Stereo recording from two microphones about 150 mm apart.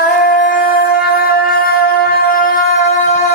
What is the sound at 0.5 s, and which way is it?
Music, 75° left (ahead or behind).